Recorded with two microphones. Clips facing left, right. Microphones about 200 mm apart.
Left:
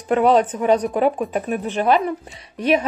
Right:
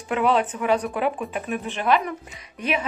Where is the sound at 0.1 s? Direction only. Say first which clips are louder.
Left 6 dB; 40° left (ahead or behind).